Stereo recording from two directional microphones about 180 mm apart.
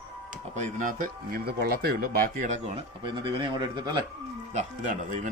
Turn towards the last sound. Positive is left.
turn(degrees=-45)  # may be behind; listen again after turning